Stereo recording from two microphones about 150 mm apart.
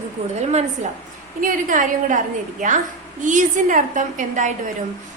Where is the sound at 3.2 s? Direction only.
55° right (ahead or behind).